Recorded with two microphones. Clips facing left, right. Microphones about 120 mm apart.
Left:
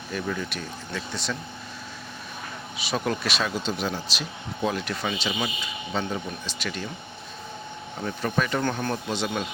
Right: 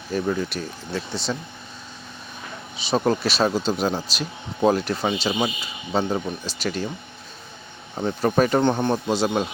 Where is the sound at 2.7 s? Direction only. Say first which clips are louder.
Right 6 dB; 30° right (ahead or behind).